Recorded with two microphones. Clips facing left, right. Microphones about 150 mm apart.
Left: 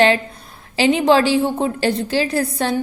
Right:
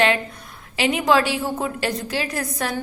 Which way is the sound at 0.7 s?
30° left (ahead or behind).